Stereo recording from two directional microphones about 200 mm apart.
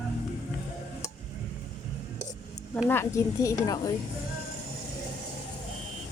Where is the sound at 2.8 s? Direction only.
15° left (ahead or behind).